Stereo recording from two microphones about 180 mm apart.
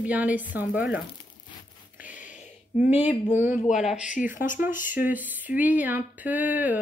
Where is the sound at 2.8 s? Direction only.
10° right (ahead or behind).